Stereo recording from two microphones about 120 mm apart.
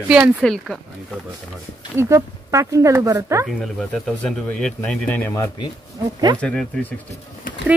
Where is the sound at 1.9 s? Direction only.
25° right (ahead or behind).